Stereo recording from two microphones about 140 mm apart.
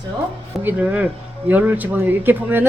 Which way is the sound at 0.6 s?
10° right (ahead or behind).